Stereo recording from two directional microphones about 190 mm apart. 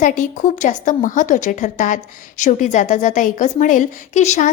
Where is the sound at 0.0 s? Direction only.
40° left (ahead or behind).